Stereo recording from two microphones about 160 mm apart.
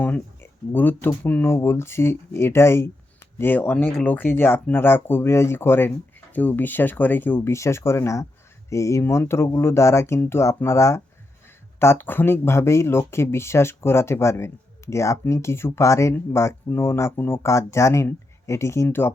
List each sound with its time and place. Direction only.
0.0 s speech: 10° left (ahead or behind)